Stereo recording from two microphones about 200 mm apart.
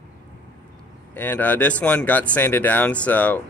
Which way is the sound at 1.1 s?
10° left (ahead or behind).